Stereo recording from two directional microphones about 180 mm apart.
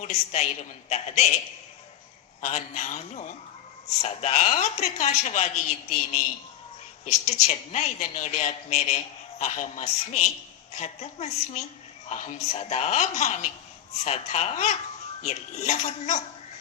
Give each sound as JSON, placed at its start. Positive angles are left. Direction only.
{"t": 0.0, "sound": "a woman's voice", "side_deg": 40}
{"t": 2.4, "sound": "a man's voice", "side_deg": 40}
{"t": 7.4, "sound": "speech", "side_deg": 40}